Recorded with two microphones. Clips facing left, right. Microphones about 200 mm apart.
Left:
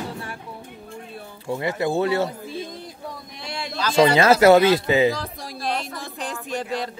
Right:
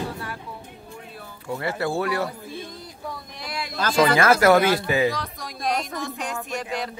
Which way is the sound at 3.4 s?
25° left (ahead or behind).